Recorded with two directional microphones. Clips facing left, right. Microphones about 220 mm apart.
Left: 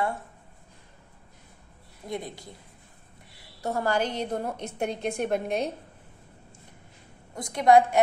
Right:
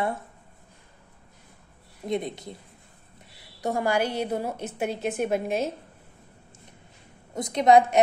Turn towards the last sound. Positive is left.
turn(degrees=-20)  # may be behind; listen again after turning